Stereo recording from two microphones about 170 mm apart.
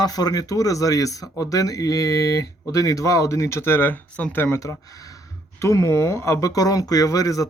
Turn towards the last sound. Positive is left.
turn(degrees=20)  # may be behind; listen again after turning